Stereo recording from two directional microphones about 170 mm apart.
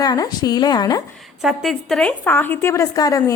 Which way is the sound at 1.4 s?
Centre (ahead or behind).